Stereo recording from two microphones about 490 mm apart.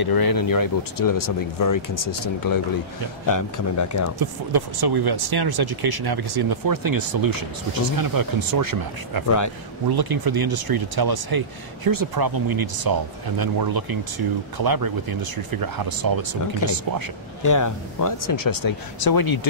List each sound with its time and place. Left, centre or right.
0.0 s speech: left
4.2 s speech: right
17.4 s speech: left